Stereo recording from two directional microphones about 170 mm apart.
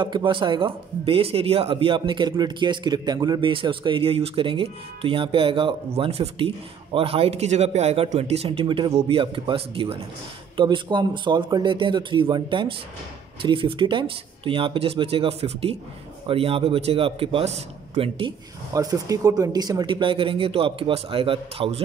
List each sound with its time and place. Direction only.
0.0 s a man's voice: 30° right (ahead or behind)
18.7 s speech: 20° right (ahead or behind)